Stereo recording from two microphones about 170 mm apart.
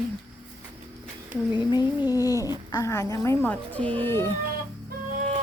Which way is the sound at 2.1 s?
20° left (ahead or behind).